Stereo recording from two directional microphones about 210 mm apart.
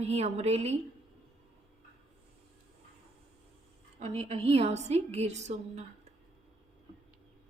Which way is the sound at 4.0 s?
30° right (ahead or behind).